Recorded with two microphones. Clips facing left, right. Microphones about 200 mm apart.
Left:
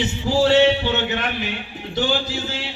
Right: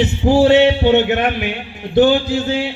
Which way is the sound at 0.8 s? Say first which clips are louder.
Right 10 dB; 60° right (ahead or behind).